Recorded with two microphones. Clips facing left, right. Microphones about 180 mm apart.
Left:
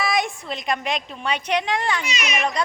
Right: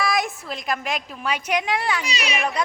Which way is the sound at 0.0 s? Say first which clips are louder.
Even; centre (ahead or behind).